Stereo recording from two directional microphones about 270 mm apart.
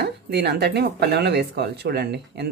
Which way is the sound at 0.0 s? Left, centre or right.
Right.